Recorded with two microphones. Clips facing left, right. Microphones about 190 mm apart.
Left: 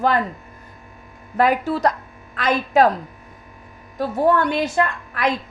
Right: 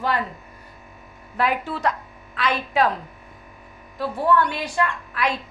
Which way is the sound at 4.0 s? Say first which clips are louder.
Left 3 dB; 45° left (ahead or behind).